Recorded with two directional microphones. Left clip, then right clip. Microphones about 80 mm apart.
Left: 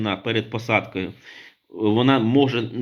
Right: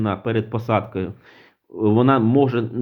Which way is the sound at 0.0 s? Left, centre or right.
Right.